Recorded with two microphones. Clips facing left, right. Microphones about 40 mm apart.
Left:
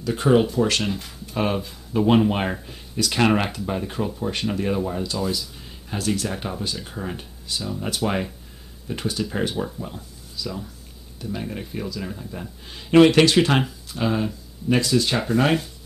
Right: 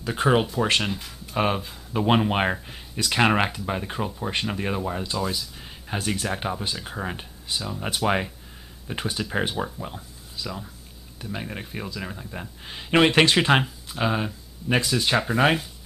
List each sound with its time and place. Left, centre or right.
0.0 s speech: right
0.8 s speech: centre
1.3 s speech: centre